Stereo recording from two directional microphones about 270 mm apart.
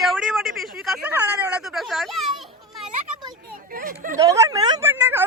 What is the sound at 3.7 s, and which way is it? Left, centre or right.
Speech, right.